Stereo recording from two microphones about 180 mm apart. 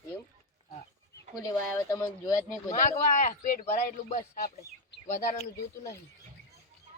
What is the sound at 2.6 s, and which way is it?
Speech, 50° left (ahead or behind).